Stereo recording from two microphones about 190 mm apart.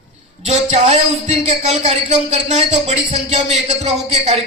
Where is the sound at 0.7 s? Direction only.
35° right (ahead or behind).